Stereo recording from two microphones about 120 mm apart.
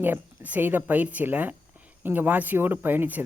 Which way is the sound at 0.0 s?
15° right (ahead or behind).